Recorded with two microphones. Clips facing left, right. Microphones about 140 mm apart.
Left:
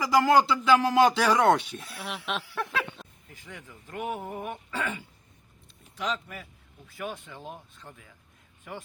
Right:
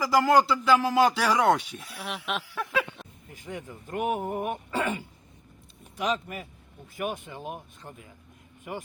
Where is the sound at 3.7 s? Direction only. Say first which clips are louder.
Right 4 dB; 45° right (ahead or behind).